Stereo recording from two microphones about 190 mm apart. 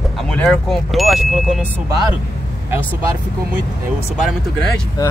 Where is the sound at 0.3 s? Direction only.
5° left (ahead or behind).